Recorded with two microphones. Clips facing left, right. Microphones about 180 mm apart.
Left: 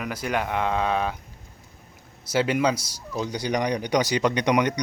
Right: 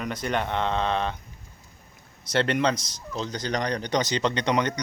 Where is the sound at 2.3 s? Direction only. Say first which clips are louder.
Left 1 dB; 5° left (ahead or behind).